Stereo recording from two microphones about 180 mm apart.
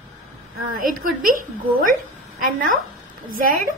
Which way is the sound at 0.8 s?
50° right (ahead or behind).